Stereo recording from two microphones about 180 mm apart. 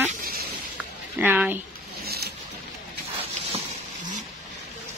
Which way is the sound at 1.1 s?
10° right (ahead or behind).